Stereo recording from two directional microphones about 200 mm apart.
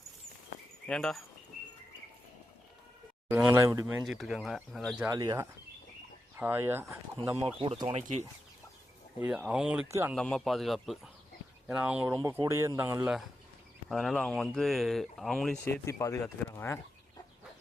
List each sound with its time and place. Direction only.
0.9 s speech: 5° left (ahead or behind)
3.2 s speech: 10° right (ahead or behind)
5.0 s speech: 15° right (ahead or behind)
7.4 s speech: 25° right (ahead or behind)
9.2 s speech: 5° right (ahead or behind)
10.2 s speech: 5° left (ahead or behind)
12.1 s speech: 15° right (ahead or behind); by 15.7 s centre (ahead or behind)
15.9 s speech: 15° left (ahead or behind)